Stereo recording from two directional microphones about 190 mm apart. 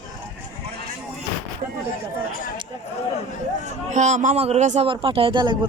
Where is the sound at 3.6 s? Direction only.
40° right (ahead or behind); by 5.7 s 25° right (ahead or behind).